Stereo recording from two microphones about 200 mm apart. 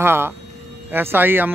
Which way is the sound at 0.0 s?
10° right (ahead or behind).